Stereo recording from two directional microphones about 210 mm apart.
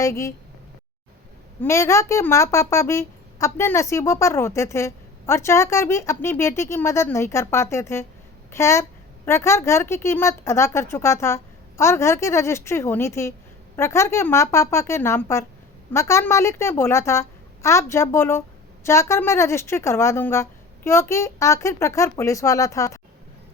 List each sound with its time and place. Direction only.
0.0 s a woman's voice: 15° left (ahead or behind)
1.6 s a woman's voice: 15° left (ahead or behind)